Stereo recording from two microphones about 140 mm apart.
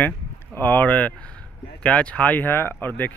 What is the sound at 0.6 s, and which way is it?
Speech, 10° left (ahead or behind).